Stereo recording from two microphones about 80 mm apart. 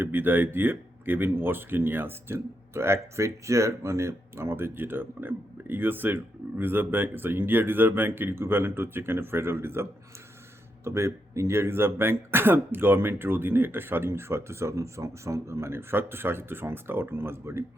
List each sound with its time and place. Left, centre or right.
0.0 s speech: right
10.8 s speech: right